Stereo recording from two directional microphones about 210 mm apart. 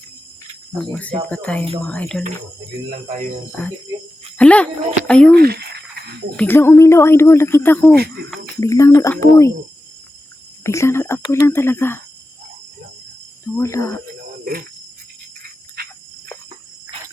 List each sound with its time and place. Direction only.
0.9 s speech: 5° left (ahead or behind)
4.4 s speech: 5° left (ahead or behind)
5.4 s speech: 50° right (ahead or behind)
6.3 s speech: 10° left (ahead or behind)
10.6 s speech: 15° left (ahead or behind)
13.4 s speech: 15° left (ahead or behind)